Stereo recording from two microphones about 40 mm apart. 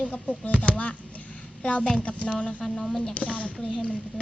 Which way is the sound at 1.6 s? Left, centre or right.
Left.